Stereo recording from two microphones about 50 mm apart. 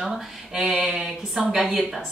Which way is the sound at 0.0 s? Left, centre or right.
Centre.